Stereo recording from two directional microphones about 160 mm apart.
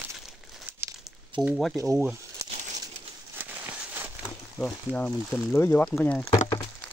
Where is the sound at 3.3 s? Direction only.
10° right (ahead or behind).